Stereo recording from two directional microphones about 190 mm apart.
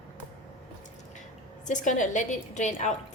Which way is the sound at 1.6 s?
40° left (ahead or behind).